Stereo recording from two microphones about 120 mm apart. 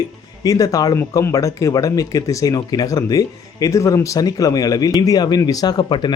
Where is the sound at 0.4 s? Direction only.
30° left (ahead or behind).